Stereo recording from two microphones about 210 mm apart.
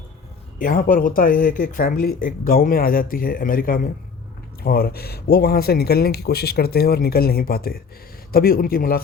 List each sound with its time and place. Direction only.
0.6 s speech: 40° left (ahead or behind)